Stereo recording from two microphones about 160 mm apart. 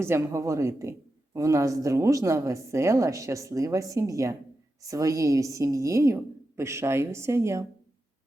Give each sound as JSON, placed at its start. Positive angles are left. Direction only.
{"t": 0.0, "sound": "a woman's voice", "side_deg": -15}